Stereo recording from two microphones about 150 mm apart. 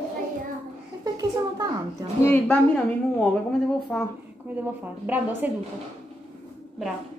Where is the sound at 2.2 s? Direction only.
15° left (ahead or behind).